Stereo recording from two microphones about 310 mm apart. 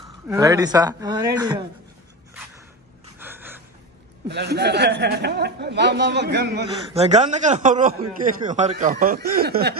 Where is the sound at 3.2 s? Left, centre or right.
Centre.